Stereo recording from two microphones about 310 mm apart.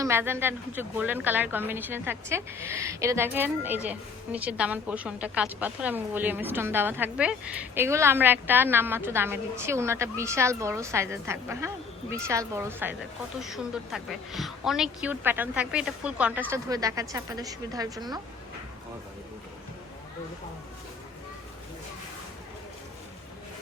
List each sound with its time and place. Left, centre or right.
0.0 s a woman's voice: centre